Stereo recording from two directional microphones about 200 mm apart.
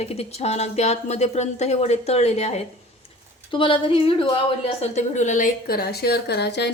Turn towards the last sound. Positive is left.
turn(degrees=55)  # may be behind; listen again after turning